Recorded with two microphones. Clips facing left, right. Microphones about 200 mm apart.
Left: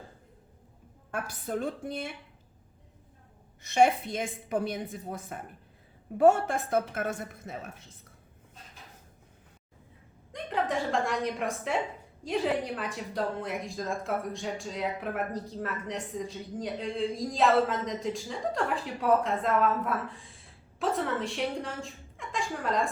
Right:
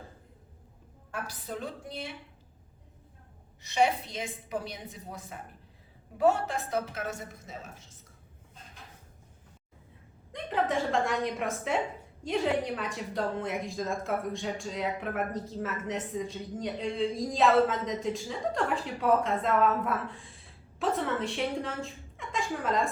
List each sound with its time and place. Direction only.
1.1 s a woman's voice: 50° left (ahead or behind)
3.6 s a woman's voice: 50° left (ahead or behind)
10.3 s a woman's voice: centre (ahead or behind)